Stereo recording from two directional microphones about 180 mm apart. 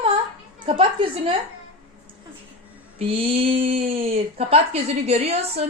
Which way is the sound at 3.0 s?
30° right (ahead or behind).